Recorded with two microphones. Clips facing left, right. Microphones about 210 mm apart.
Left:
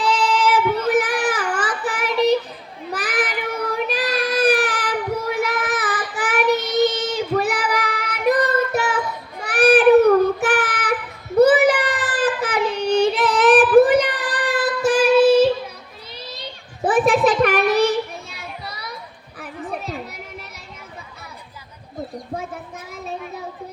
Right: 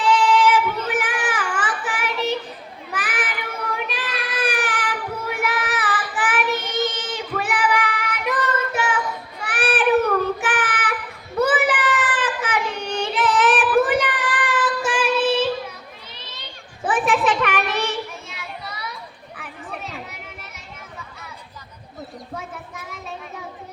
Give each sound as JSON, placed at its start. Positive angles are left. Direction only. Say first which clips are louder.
{"t": 0.1, "sound": "child singing", "louder": "right 4 dB", "side_deg": 40}
{"t": 16.8, "sound": "a sound", "louder": "left 4 dB", "side_deg": 40}
{"t": 19.4, "sound": "children playing", "louder": "left 5 dB", "side_deg": 40}